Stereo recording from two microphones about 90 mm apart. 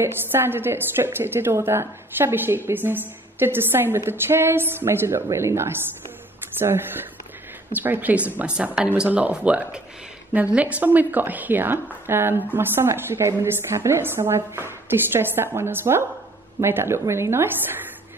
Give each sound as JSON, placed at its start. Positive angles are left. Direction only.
{"t": 0.0, "sound": "a woman's voice", "side_deg": -25}